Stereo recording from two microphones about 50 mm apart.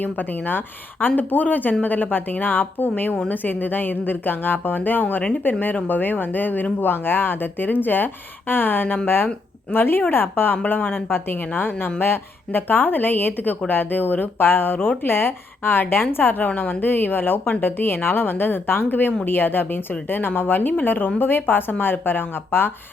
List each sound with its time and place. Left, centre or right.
0.0 s a woman's voice: left